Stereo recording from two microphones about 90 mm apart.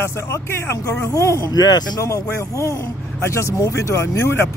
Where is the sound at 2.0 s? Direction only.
35° left (ahead or behind).